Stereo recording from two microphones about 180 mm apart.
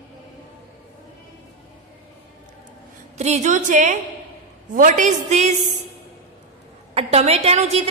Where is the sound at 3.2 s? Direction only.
40° right (ahead or behind).